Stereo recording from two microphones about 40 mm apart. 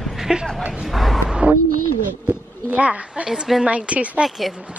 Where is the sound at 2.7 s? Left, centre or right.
Right.